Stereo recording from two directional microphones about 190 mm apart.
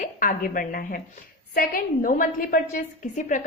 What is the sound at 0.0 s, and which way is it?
A woman's voice, 45° left (ahead or behind).